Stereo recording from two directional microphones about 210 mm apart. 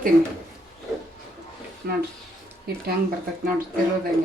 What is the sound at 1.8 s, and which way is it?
Speech, 50° right (ahead or behind).